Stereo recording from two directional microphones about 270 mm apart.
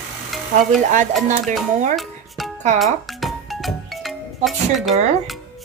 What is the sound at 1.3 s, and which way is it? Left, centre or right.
Speech, right.